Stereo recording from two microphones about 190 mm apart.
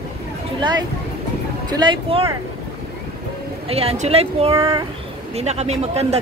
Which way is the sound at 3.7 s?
30° right (ahead or behind).